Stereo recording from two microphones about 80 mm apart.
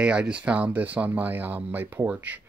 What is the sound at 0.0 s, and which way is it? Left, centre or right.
Speech, centre.